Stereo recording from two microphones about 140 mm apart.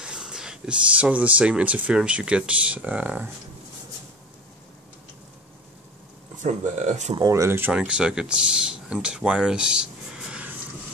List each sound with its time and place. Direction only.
0.0 s speech: 5° right (ahead or behind)
6.4 s speech: 60° right (ahead or behind)
7.2 s speech: 25° right (ahead or behind)
7.7 s speech: 5° right (ahead or behind)